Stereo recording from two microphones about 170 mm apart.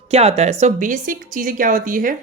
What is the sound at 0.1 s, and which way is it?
Speech, 40° right (ahead or behind).